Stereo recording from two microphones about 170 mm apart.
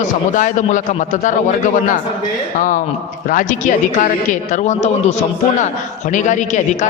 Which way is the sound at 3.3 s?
50° left (ahead or behind).